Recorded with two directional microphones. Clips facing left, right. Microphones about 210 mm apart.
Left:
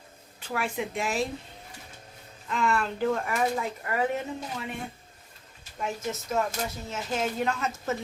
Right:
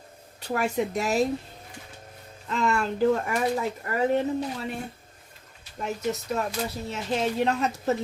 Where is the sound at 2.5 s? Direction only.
40° right (ahead or behind).